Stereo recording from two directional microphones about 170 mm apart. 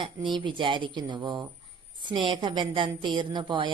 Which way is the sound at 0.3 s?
30° right (ahead or behind).